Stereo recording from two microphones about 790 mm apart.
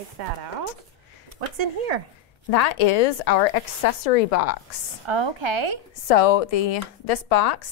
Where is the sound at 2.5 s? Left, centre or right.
Left.